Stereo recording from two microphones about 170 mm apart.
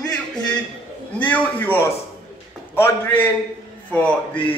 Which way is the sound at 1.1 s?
10° left (ahead or behind).